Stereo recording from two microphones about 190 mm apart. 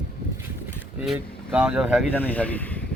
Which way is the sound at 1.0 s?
5° right (ahead or behind).